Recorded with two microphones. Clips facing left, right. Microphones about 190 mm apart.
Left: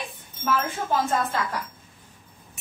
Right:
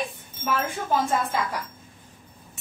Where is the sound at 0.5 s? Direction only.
15° right (ahead or behind).